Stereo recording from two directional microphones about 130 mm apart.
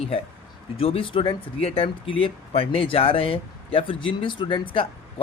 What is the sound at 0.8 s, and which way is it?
Speech, 45° left (ahead or behind).